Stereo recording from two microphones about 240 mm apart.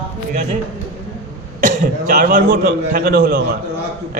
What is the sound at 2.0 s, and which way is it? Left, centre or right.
A man's voice, right.